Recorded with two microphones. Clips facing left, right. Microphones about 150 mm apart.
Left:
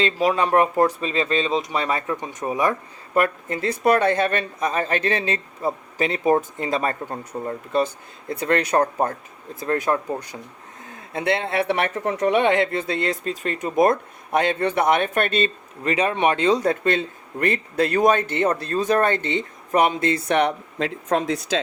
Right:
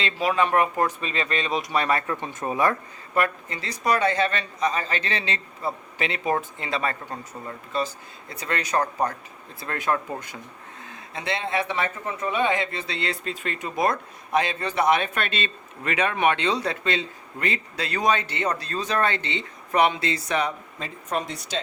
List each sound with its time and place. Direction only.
0.0 s speech: 40° left (ahead or behind); by 2.7 s 15° left (ahead or behind)
3.2 s speech: 50° left (ahead or behind)
7.3 s speech: 30° left (ahead or behind)
7.7 s speech: 55° left (ahead or behind)
9.6 s speech: 40° left (ahead or behind)
10.8 s speech: 50° left (ahead or behind)
14.3 s speech: 60° left (ahead or behind); by 21.2 s 90° left